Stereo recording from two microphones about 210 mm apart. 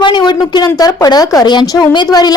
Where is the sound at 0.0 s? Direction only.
20° left (ahead or behind).